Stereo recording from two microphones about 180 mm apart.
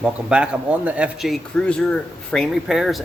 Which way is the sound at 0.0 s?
5° right (ahead or behind).